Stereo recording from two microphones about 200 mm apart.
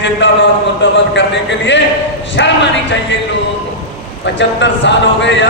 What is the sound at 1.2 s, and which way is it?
Speech, 65° left (ahead or behind).